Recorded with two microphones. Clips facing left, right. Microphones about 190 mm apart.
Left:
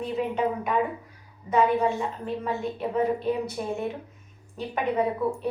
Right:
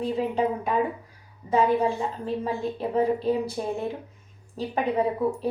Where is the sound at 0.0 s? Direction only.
35° right (ahead or behind).